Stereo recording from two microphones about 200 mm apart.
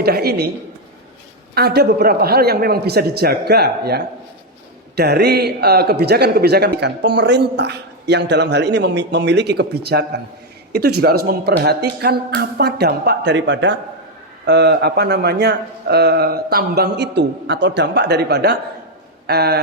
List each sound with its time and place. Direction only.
0.0 s speech: 50° right (ahead or behind)
1.5 s a man's voice: 55° right (ahead or behind)